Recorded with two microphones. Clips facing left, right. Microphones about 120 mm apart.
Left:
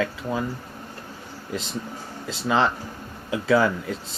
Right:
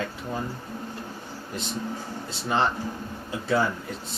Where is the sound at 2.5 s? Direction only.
90° left.